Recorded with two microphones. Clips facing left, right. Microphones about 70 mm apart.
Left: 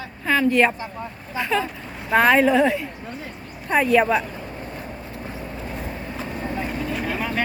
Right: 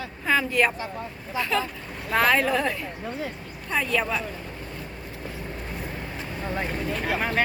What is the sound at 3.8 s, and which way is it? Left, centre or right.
Speech, left.